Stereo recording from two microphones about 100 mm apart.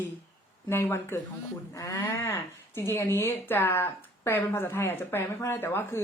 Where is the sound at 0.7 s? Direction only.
25° left (ahead or behind).